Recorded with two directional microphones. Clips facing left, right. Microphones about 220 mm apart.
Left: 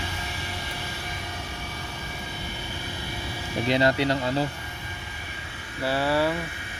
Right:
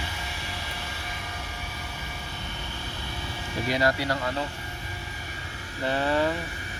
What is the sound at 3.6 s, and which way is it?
Speech, 25° left (ahead or behind).